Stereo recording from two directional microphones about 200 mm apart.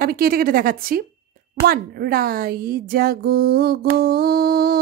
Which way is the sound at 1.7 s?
50° right (ahead or behind).